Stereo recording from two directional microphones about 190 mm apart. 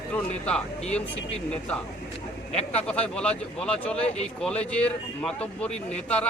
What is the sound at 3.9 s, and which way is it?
Speech, 35° left (ahead or behind).